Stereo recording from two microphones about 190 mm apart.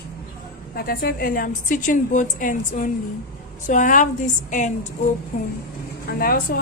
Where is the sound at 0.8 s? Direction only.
50° left (ahead or behind).